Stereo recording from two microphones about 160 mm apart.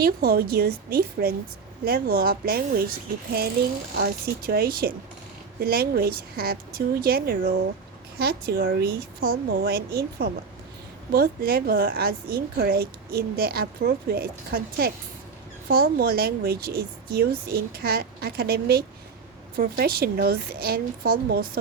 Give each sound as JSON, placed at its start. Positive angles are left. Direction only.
{"t": 0.0, "sound": "a woman's voice", "side_deg": -75}
{"t": 3.9, "sound": "a woman's voice", "side_deg": -75}
{"t": 8.2, "sound": "a woman's voice", "side_deg": -80}
{"t": 11.1, "sound": "a woman's voice", "side_deg": -70}